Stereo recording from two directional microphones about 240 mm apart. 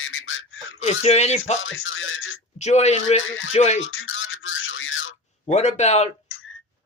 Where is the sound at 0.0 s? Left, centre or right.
Left.